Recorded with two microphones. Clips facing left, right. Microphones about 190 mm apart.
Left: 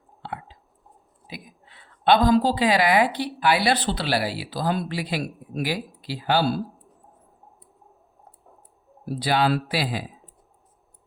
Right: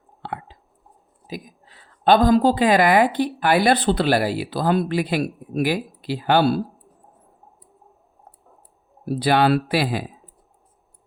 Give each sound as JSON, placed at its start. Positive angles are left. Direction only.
{"t": 0.2, "sound": "a sound", "side_deg": -60}
{"t": 1.3, "sound": "speech", "side_deg": -40}
{"t": 9.0, "sound": "speech", "side_deg": -60}